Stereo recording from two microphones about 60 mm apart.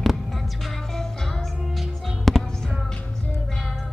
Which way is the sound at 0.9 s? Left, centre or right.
Centre.